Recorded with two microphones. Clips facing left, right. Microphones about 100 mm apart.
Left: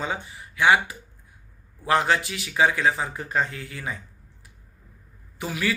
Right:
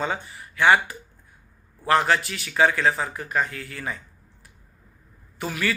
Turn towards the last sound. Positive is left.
turn(degrees=15)  # may be behind; listen again after turning